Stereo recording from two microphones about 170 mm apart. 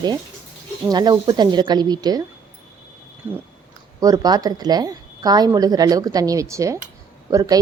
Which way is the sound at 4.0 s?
20° right (ahead or behind).